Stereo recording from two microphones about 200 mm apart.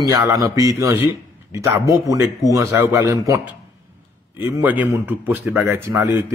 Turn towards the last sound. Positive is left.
turn(degrees=-15)  # may be behind; listen again after turning